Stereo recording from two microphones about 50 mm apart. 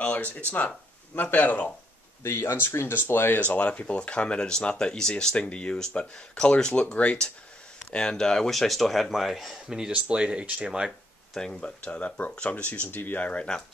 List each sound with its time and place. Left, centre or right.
0.0 s speech: left
2.2 s speech: left
2.9 s speech: left
3.3 s speech: left; by 9.6 s centre
9.7 s speech: centre
9.9 s speech: right
11.3 s speech: centre
11.6 s speech: left
13.2 s speech: left